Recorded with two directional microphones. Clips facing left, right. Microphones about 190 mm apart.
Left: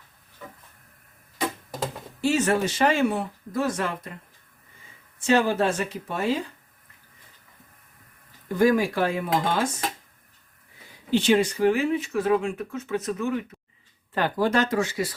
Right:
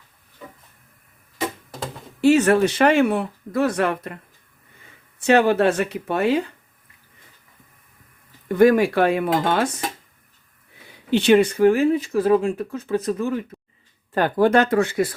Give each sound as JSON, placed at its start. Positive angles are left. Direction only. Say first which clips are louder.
{"t": 2.2, "sound": "speech", "louder": "right 7 dB", "side_deg": -65}
{"t": 5.2, "sound": "speech", "louder": "right 5 dB", "side_deg": -65}
{"t": 8.4, "sound": "speech", "louder": "right 6 dB", "side_deg": -65}
{"t": 11.1, "sound": "speech", "louder": "right 5 dB", "side_deg": -65}
{"t": 14.1, "sound": "speech", "louder": "right 6 dB", "side_deg": -45}